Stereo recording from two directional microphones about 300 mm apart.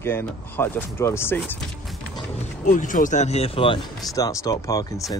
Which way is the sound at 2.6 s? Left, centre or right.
Left.